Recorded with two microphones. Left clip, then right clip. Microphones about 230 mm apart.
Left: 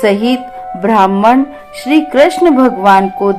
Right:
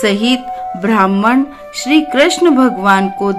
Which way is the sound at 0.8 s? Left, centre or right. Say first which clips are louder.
Left 4 dB; right.